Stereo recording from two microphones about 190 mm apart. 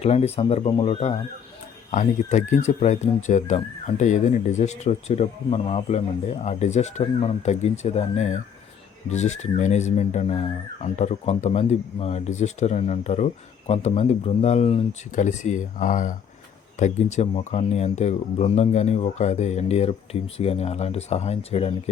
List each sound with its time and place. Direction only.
0.0 s speech: 35° left (ahead or behind)